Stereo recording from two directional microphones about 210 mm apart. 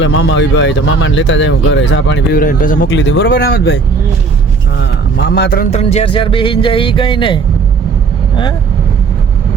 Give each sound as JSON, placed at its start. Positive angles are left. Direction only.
{"t": 0.0, "sound": "speech", "side_deg": 60}
{"t": 2.3, "sound": "speech", "side_deg": 40}
{"t": 2.9, "sound": "speech", "side_deg": 60}
{"t": 5.1, "sound": "a man's voice", "side_deg": 55}
{"t": 5.7, "sound": "speech", "side_deg": 30}